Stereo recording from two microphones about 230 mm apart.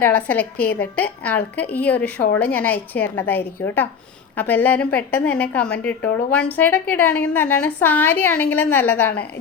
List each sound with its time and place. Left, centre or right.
0.0 s a woman's voice: centre
0.5 s a woman's voice: left
1.2 s a woman's voice: centre